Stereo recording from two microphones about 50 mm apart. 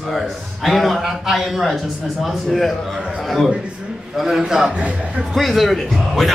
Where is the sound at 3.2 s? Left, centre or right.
Centre.